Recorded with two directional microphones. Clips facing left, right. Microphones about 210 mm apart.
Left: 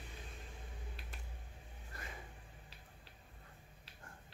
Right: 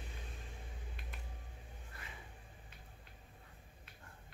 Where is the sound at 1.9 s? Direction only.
40° left (ahead or behind).